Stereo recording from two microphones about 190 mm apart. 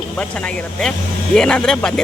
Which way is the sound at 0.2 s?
5° left (ahead or behind).